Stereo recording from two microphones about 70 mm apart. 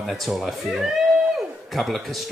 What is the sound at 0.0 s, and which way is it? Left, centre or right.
Speech, centre.